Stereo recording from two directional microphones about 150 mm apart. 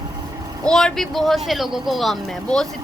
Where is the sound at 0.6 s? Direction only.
5° left (ahead or behind).